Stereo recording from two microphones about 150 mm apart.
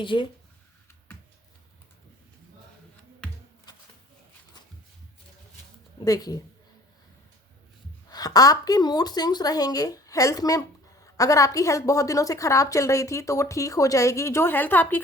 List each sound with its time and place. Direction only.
0.0 s speech: 35° left (ahead or behind)
3.7 s a sound: 30° left (ahead or behind)
6.1 s a woman's voice: 25° left (ahead or behind)
8.1 s a woman's voice: 25° left (ahead or behind)